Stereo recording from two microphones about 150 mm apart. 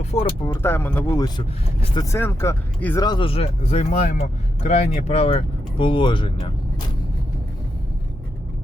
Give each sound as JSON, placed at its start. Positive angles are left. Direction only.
{"t": 0.0, "sound": "a sound", "side_deg": 50}
{"t": 0.4, "sound": "speech", "side_deg": 15}
{"t": 1.4, "sound": "speech", "side_deg": 30}
{"t": 2.0, "sound": "speech", "side_deg": 15}
{"t": 3.1, "sound": "speech", "side_deg": 35}